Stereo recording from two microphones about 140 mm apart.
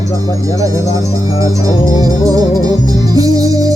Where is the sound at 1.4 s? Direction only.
25° right (ahead or behind).